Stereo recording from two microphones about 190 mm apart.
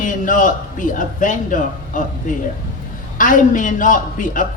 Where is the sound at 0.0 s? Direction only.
45° left (ahead or behind).